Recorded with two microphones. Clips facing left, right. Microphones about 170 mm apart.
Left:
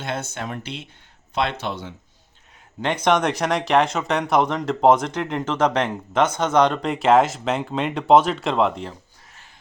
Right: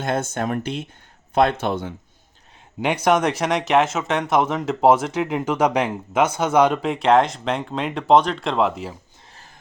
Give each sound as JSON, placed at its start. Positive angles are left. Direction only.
{"t": 0.0, "sound": "speech", "side_deg": -50}
{"t": 2.8, "sound": "speech", "side_deg": -10}